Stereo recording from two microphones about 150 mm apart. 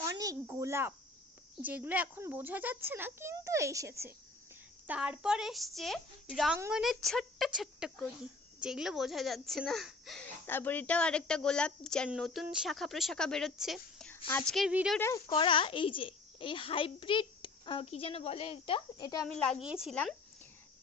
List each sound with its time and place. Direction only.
0.0 s a sound: 25° right (ahead or behind)
0.5 s a child's voice: 15° right (ahead or behind)
4.9 s a woman's voice: 10° right (ahead or behind)
10.4 s a woman's voice: 15° left (ahead or behind)
14.3 s speech: 10° left (ahead or behind)
14.5 s a woman's voice: 5° right (ahead or behind)
14.9 s speech: 20° left (ahead or behind)
15.4 s a child's voice: 35° left (ahead or behind)
19.2 s a woman's voice: 5° left (ahead or behind)